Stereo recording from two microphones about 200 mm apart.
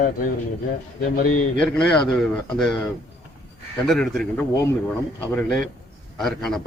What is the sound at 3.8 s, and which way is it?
A man's voice, centre (ahead or behind).